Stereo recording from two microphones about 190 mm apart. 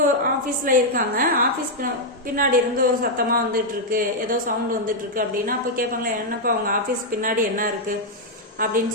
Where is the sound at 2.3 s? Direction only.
45° right (ahead or behind).